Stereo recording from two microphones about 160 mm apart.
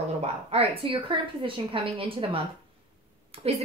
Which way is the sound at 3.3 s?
40° right (ahead or behind).